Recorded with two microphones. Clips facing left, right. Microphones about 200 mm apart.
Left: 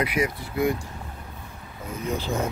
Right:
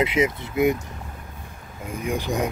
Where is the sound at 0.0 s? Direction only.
25° right (ahead or behind).